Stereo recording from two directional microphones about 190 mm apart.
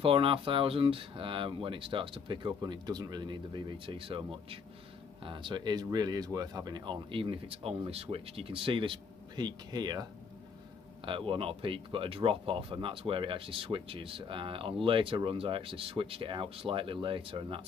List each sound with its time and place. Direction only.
0.0 s speech: 30° right (ahead or behind)
11.1 s speech: 30° right (ahead or behind)